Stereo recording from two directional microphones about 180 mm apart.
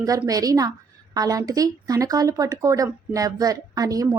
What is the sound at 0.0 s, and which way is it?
Speech, 20° right (ahead or behind).